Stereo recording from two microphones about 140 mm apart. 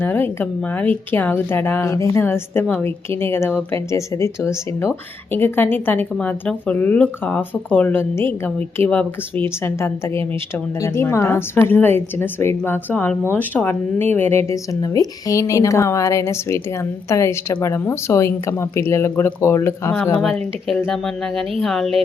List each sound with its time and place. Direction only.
0.0 s speech: 15° left (ahead or behind)
20.1 s speech: centre (ahead or behind)